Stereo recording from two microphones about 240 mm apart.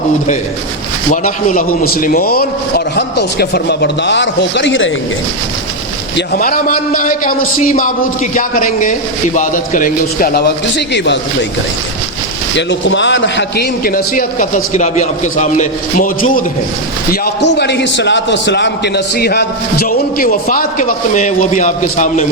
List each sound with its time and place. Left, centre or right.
1.1 s a man's voice: left
6.1 s a man's voice: left
12.5 s a man's voice: left